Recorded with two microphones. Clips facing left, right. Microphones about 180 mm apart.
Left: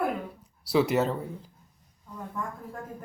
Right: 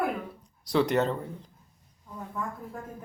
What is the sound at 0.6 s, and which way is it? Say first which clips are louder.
Speech: left 1 dB; 5° left (ahead or behind).